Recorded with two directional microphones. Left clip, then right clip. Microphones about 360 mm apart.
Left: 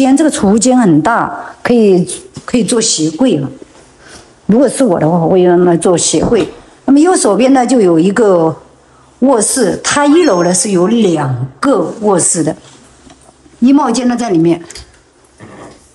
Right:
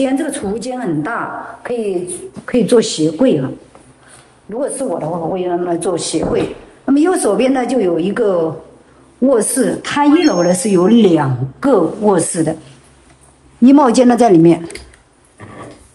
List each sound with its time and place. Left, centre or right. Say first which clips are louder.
0.0 s a woman's voice: left 7 dB; centre
2.4 s a woman's voice: right 1 dB; centre
4.6 s speech: left 9 dB; left
6.9 s a woman's voice: left 4 dB; centre
13.6 s a woman's voice: right 1 dB; centre